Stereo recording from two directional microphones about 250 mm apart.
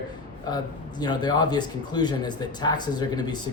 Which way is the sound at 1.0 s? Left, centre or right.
Centre.